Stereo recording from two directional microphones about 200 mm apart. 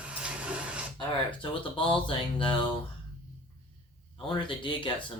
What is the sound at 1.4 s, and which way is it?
Speech, 25° left (ahead or behind).